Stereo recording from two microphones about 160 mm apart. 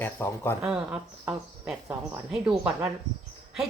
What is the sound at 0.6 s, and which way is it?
Speech, 5° right (ahead or behind).